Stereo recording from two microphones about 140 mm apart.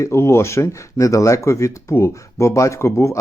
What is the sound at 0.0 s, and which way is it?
Speech, 20° left (ahead or behind).